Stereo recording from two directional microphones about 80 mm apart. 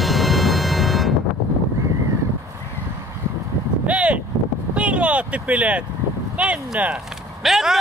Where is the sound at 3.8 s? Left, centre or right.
Centre.